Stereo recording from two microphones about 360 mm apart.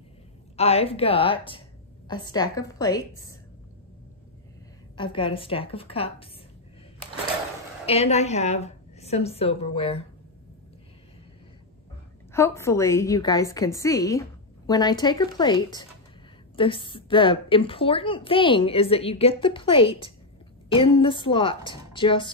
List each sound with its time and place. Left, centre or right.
0.6 s a woman's voice: centre
4.9 s a woman's voice: centre
7.8 s a woman's voice: centre
12.3 s a woman's voice: centre